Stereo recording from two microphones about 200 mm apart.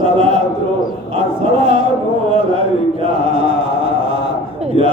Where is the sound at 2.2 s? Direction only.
25° right (ahead or behind).